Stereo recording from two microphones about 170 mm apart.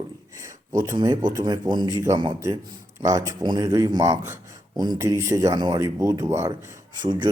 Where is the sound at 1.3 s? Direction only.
25° right (ahead or behind).